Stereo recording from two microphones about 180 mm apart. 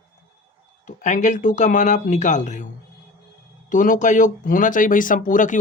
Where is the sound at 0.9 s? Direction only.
40° left (ahead or behind).